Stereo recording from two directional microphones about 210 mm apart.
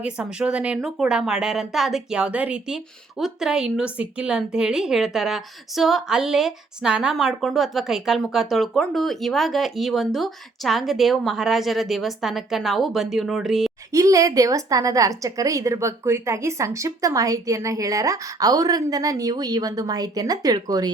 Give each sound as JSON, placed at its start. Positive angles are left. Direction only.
{"t": 0.0, "sound": "speech", "side_deg": -5}
{"t": 13.9, "sound": "a woman's voice", "side_deg": -15}